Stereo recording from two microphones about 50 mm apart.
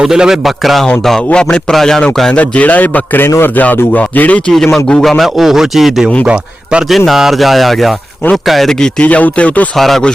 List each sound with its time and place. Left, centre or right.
0.0 s a man's voice: centre
0.6 s a man's voice: centre
1.3 s speech: centre
2.3 s a man's voice: left
3.2 s a man's voice: left
3.5 s a man's voice: left
5.0 s a man's voice: centre
6.2 s a man's voice: right
6.9 s a man's voice: centre
9.0 s speech: left
9.7 s a man's voice: centre